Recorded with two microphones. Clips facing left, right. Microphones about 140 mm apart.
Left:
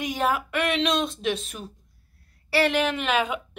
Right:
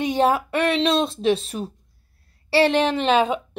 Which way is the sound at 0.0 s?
30° right (ahead or behind).